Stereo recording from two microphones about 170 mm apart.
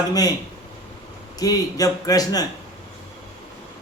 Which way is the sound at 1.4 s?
20° left (ahead or behind).